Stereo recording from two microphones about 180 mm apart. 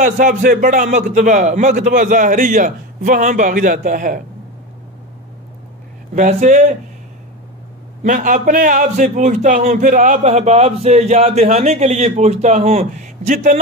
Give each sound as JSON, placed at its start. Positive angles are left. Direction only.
{"t": 0.0, "sound": "a man's voice", "side_deg": -45}
{"t": 6.1, "sound": "a man's voice", "side_deg": -40}
{"t": 8.0, "sound": "a man's voice", "side_deg": -45}